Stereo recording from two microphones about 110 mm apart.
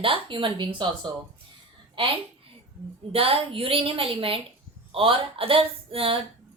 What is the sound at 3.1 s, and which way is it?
A woman's voice, 60° right (ahead or behind).